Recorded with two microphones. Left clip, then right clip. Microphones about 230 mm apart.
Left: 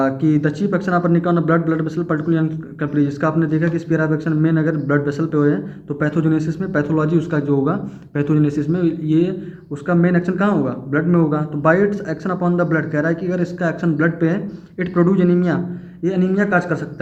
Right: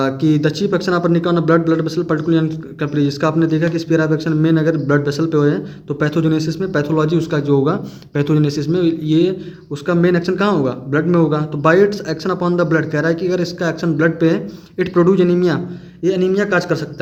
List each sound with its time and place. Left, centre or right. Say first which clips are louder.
0.0 s speech: right 1 dB; right